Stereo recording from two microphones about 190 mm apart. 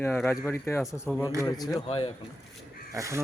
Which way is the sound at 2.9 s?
15° right (ahead or behind).